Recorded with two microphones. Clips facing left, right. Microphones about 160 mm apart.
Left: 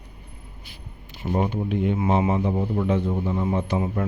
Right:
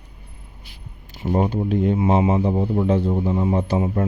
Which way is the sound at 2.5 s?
15° right (ahead or behind).